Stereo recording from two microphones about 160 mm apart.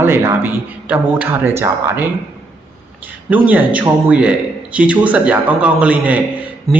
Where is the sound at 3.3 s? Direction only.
10° right (ahead or behind).